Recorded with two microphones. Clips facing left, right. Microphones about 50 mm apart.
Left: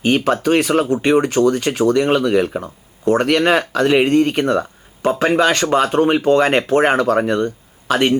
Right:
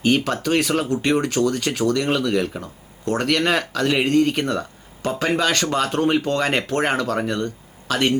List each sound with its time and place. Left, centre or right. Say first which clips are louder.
0.0 s speech: left 4 dB; left